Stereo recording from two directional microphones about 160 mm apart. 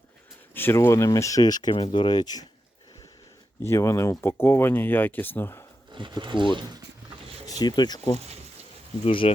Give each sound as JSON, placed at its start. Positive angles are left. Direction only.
{"t": 0.5, "sound": "speech", "side_deg": 15}
{"t": 3.6, "sound": "speech", "side_deg": 15}
{"t": 5.9, "sound": "speech", "side_deg": -30}
{"t": 7.6, "sound": "speech", "side_deg": 25}
{"t": 9.0, "sound": "speech", "side_deg": 35}